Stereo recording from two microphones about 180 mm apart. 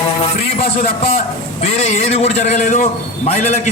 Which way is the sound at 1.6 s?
40° left (ahead or behind).